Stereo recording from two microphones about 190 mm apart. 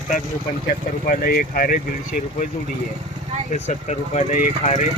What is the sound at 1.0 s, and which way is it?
Speech, 50° left (ahead or behind).